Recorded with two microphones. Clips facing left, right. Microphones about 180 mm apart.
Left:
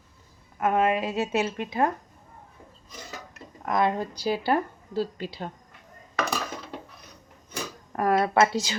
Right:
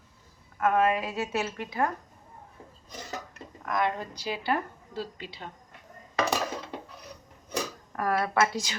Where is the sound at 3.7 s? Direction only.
30° left (ahead or behind).